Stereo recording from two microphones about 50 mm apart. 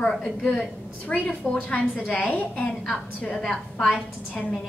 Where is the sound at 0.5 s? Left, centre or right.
Centre.